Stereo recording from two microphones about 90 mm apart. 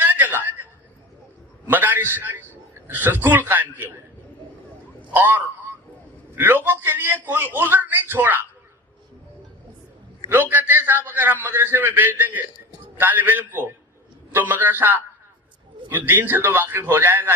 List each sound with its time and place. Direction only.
0.0 s a sound: 20° right (ahead or behind)
5.1 s a man's voice: 20° right (ahead or behind)
10.2 s a man's voice: 25° right (ahead or behind)